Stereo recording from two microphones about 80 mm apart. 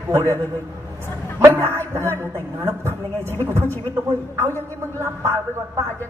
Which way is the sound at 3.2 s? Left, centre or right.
Left.